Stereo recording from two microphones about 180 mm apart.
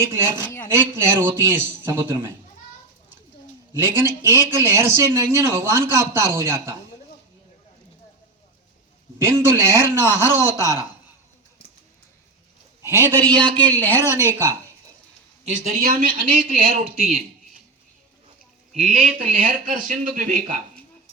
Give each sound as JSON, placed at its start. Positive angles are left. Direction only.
{"t": 0.7, "sound": "a man's voice", "side_deg": -15}
{"t": 3.8, "sound": "a man's voice", "side_deg": -15}
{"t": 9.1, "sound": "a man's voice", "side_deg": -15}
{"t": 10.2, "sound": "a woman's voice", "side_deg": 15}
{"t": 12.8, "sound": "a man's voice", "side_deg": -15}
{"t": 13.3, "sound": "speech", "side_deg": -25}
{"t": 13.7, "sound": "a woman's voice", "side_deg": 10}
{"t": 15.4, "sound": "speech", "side_deg": -45}
{"t": 18.8, "sound": "speech", "side_deg": -50}